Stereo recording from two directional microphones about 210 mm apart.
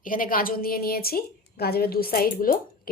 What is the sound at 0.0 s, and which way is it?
A woman's voice, 40° left (ahead or behind).